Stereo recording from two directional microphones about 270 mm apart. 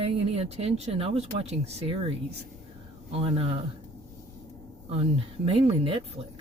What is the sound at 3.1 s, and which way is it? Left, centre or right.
Speech, right.